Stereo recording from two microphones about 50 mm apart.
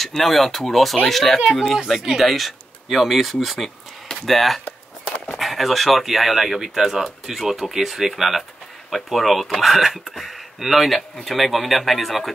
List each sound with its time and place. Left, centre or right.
0.0 s speech: centre